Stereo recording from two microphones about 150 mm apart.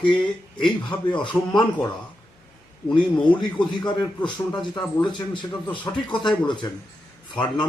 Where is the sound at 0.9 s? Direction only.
30° left (ahead or behind).